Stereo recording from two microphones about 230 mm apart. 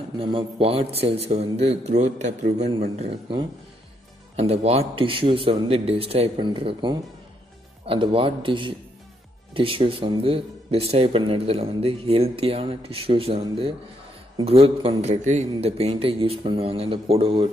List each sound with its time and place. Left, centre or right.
0.2 s speech: right